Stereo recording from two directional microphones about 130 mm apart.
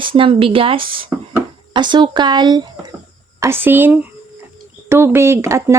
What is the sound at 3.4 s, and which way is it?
Speech, 15° right (ahead or behind).